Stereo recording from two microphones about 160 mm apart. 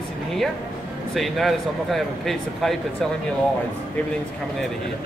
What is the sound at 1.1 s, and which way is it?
Speech, centre (ahead or behind).